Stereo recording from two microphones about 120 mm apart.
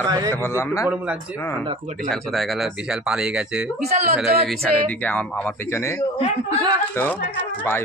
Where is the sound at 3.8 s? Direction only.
65° right (ahead or behind).